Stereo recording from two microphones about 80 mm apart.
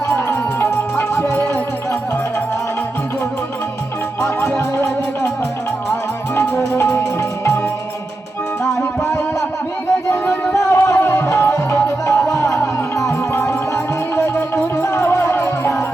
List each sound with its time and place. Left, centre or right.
0.1 s music: left
4.2 s music: centre
6.6 s music: left
10.1 s music: left